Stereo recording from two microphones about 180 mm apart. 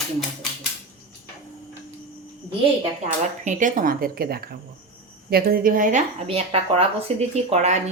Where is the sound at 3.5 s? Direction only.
45° right (ahead or behind).